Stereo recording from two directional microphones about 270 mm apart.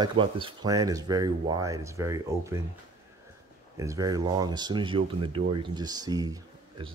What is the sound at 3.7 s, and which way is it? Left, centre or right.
Speech, centre.